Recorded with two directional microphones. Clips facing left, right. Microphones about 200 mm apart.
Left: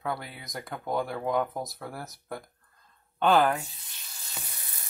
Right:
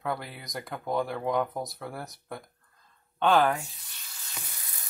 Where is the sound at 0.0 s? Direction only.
Centre (ahead or behind).